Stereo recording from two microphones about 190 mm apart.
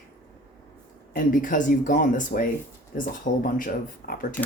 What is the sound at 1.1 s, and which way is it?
Speech, 45° left (ahead or behind).